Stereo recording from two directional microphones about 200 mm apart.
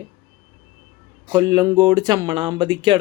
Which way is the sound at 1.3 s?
20° right (ahead or behind).